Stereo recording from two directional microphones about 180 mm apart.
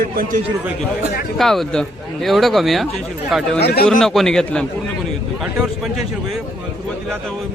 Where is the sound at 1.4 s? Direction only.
Centre (ahead or behind).